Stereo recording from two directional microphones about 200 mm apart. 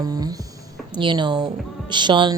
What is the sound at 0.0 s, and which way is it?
Music, 20° right (ahead or behind).